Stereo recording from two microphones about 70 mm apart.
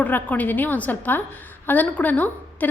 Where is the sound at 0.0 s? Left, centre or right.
Left.